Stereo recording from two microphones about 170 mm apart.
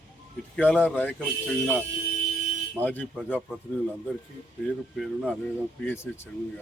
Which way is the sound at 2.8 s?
10° left (ahead or behind).